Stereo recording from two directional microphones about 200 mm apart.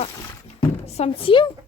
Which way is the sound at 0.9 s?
30° left (ahead or behind).